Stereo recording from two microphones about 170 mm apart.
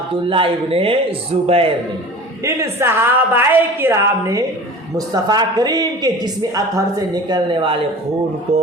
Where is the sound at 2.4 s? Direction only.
15° right (ahead or behind).